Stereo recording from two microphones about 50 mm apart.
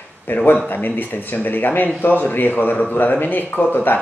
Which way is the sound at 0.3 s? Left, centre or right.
Left.